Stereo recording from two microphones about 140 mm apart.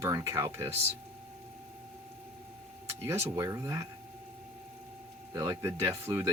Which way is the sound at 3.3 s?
25° right (ahead or behind).